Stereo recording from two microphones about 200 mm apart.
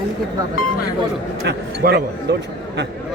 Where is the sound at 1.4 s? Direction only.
55° right (ahead or behind).